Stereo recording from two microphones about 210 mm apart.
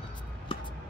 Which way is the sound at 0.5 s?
25° left (ahead or behind).